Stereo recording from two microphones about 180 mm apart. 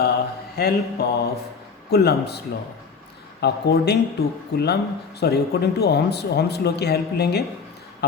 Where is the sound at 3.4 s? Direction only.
65° left (ahead or behind).